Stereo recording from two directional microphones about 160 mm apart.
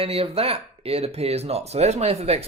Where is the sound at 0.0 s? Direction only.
40° right (ahead or behind).